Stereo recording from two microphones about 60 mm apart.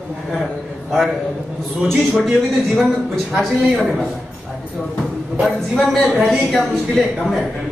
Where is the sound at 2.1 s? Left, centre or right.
Centre.